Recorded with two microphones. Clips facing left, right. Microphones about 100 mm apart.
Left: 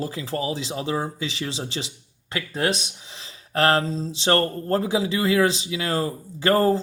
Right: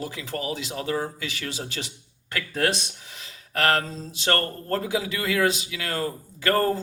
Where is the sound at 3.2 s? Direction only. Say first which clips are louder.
Left 4 dB; 30° left (ahead or behind).